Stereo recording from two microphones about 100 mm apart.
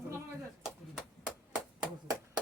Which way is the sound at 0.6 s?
5° right (ahead or behind).